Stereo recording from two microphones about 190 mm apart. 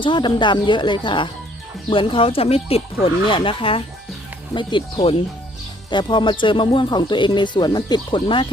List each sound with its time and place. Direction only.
0.0 s speech: 25° left (ahead or behind)